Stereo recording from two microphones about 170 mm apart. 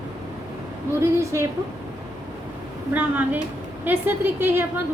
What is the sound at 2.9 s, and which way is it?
A woman's voice, 10° right (ahead or behind).